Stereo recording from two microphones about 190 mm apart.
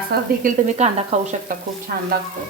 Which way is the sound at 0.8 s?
35° right (ahead or behind).